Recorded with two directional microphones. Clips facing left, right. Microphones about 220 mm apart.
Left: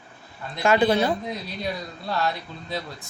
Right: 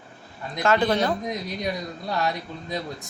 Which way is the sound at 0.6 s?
10° left (ahead or behind).